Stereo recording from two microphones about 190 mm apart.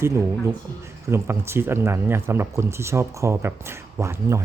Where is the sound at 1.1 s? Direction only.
15° right (ahead or behind).